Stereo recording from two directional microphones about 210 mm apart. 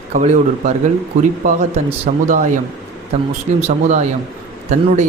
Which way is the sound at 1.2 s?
35° right (ahead or behind).